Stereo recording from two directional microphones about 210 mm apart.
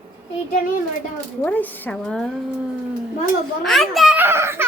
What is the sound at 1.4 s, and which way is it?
Speech, 10° left (ahead or behind).